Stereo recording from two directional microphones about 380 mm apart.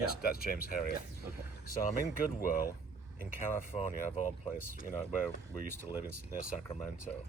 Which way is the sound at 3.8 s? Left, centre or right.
Centre.